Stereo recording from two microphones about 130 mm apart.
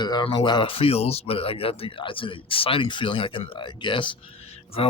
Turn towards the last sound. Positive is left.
turn(degrees=50)  # may be behind; listen again after turning